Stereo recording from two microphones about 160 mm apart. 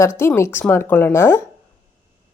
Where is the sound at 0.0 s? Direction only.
15° left (ahead or behind).